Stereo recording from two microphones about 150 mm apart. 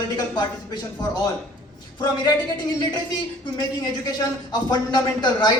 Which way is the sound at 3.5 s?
25° left (ahead or behind).